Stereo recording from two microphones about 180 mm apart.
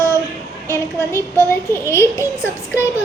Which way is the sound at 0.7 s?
15° left (ahead or behind).